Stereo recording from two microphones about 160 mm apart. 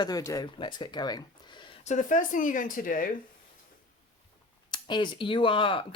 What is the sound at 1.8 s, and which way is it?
Speech, 50° left (ahead or behind).